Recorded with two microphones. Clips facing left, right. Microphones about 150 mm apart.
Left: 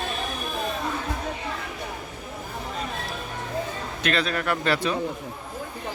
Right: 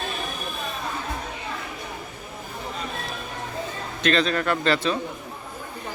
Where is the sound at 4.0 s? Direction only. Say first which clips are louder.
Right 4 dB; 5° left (ahead or behind).